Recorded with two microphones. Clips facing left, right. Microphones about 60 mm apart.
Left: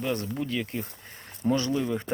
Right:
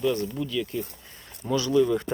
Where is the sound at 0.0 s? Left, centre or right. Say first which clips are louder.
Right 3 dB; left.